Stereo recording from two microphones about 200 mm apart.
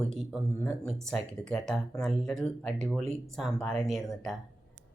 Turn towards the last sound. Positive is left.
turn(degrees=0)  # may be behind; listen again after turning